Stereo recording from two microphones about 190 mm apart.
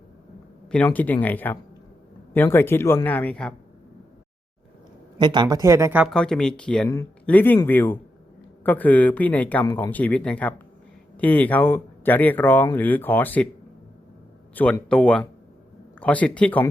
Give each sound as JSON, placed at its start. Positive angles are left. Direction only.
{"t": 0.9, "sound": "speech", "side_deg": 10}
{"t": 5.1, "sound": "speech", "side_deg": -25}
{"t": 6.1, "sound": "speech", "side_deg": 5}
{"t": 6.8, "sound": "speech", "side_deg": 15}
{"t": 14.5, "sound": "speech", "side_deg": 10}